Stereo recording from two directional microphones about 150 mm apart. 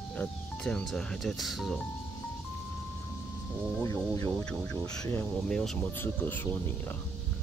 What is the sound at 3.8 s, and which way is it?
Speech, 20° left (ahead or behind).